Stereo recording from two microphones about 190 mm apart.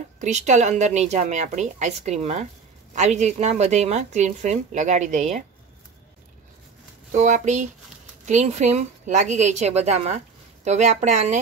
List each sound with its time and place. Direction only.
0.2 s a woman's voice: 40° right (ahead or behind)
7.1 s a woman's voice: 40° right (ahead or behind)